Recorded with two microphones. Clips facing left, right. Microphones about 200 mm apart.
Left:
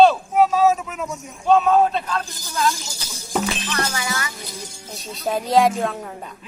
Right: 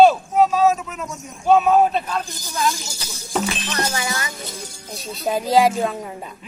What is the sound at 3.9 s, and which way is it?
Speech, 20° right (ahead or behind).